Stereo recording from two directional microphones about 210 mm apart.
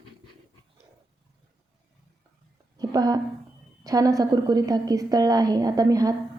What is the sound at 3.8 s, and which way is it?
A woman's voice, 15° right (ahead or behind).